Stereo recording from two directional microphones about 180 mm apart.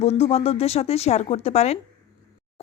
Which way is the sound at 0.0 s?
35° left (ahead or behind).